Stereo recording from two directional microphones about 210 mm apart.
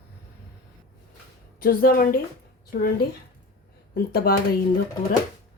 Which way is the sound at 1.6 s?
45° left (ahead or behind).